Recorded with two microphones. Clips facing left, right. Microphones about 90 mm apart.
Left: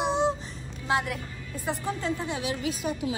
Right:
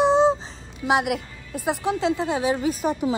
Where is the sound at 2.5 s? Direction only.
40° right (ahead or behind).